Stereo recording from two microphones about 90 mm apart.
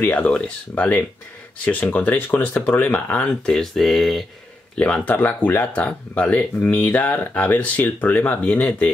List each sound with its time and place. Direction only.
0.1 s speech: 10° left (ahead or behind)
4.7 s speech: 15° left (ahead or behind)